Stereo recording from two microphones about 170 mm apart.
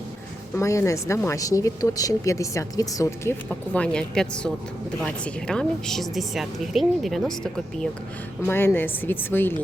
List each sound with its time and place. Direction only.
0.5 s a woman's voice: 15° left (ahead or behind)